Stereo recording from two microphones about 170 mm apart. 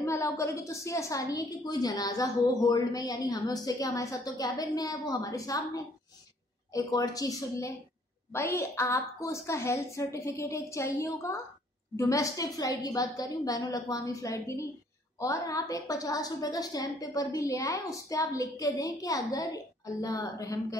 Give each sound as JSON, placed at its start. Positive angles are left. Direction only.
{"t": 0.0, "sound": "a woman's voice", "side_deg": 15}